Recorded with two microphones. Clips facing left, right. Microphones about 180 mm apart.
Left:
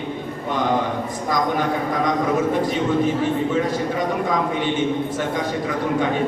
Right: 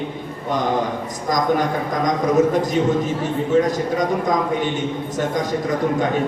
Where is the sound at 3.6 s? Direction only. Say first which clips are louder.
Right 2 dB; 40° right (ahead or behind).